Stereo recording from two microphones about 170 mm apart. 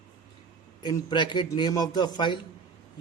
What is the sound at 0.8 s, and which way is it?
Speech, 25° left (ahead or behind).